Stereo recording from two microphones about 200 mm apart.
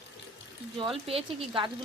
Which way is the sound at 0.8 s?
25° right (ahead or behind).